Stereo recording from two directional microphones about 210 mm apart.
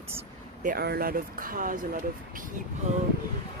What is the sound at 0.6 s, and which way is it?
Speech, 45° right (ahead or behind).